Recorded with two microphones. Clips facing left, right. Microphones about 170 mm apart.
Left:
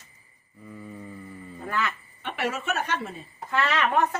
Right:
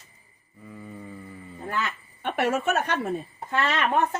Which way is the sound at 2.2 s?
50° right (ahead or behind).